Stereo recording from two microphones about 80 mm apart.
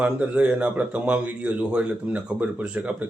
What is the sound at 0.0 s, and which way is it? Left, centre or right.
Speech, centre.